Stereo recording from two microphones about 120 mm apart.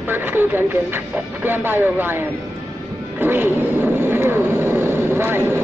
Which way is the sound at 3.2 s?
15° right (ahead or behind).